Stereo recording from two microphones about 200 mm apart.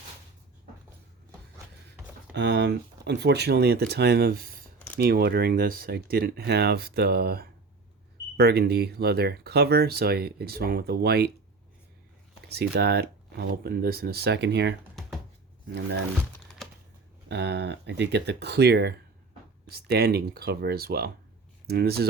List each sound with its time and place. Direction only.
2.3 s speech: 60° right (ahead or behind)
12.5 s speech: 55° right (ahead or behind)
17.2 s speech: 60° right (ahead or behind)